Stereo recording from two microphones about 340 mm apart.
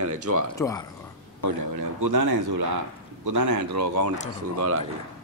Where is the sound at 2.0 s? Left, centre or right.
Right.